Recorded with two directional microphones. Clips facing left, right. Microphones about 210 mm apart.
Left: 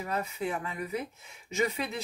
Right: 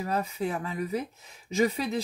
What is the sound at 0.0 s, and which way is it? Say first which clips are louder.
Speech: right 3 dB; 35° right (ahead or behind).